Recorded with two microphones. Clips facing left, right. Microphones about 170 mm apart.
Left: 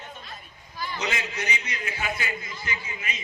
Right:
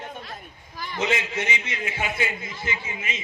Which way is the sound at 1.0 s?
25° right (ahead or behind).